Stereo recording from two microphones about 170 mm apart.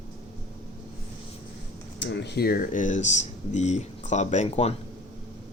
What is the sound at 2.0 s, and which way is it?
Speech, 90° left.